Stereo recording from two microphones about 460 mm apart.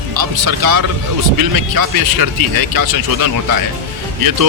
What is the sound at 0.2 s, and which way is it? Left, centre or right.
Speech, right.